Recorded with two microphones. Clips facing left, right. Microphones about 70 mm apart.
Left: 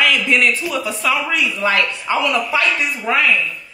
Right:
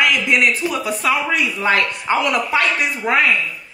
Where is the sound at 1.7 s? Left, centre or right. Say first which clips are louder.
Right 1 dB; right.